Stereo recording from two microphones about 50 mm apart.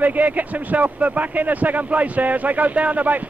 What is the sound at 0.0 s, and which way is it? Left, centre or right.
A man's voice, right.